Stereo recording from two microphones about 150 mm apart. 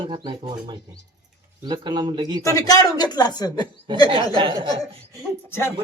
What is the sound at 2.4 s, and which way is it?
Speech, 25° left (ahead or behind).